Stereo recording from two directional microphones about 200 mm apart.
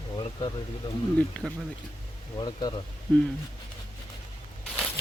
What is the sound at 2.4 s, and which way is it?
Speech, 20° left (ahead or behind).